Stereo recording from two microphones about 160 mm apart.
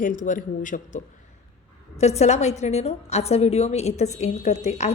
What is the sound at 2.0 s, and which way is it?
A woman's voice, 45° left (ahead or behind).